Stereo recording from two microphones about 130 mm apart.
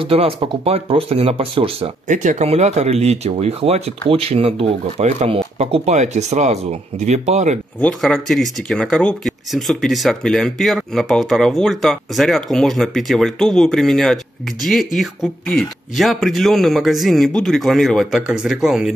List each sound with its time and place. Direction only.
0.0 s speech: 45° right (ahead or behind)
2.0 s speech: 70° right (ahead or behind)
7.8 s speech: 5° left (ahead or behind)